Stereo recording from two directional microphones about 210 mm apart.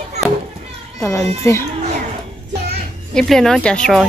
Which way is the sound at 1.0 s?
15° left (ahead or behind).